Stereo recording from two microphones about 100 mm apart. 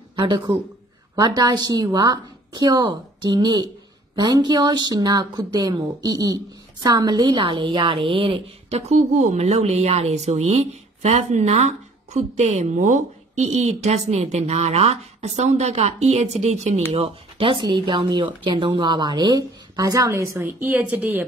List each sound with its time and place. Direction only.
1.2 s a woman's voice: 45° right (ahead or behind); by 21.3 s 20° right (ahead or behind)